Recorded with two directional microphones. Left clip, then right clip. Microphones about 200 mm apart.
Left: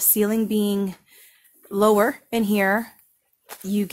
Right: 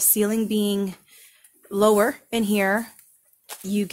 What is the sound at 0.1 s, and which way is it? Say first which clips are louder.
Speech: left 3 dB; 20° left (ahead or behind).